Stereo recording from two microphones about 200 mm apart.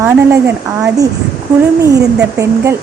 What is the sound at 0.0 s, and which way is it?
Speech, 10° right (ahead or behind).